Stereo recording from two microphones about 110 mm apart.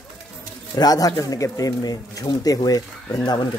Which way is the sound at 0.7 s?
35° left (ahead or behind).